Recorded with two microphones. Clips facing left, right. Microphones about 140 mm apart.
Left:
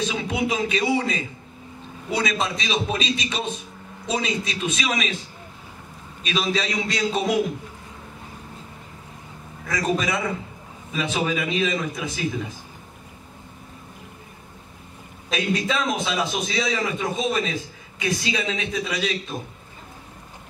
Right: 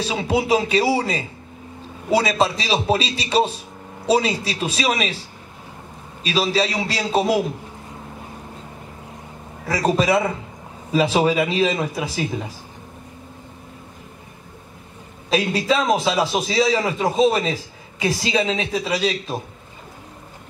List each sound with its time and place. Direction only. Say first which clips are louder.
0.0 s a man's voice: right 3 dB; 35° right (ahead or behind)
6.2 s a man's voice: right 4 dB; 30° right (ahead or behind)
9.7 s a man's voice: right 5 dB; 30° right (ahead or behind)
15.2 s a man's voice: right 5 dB; 30° right (ahead or behind)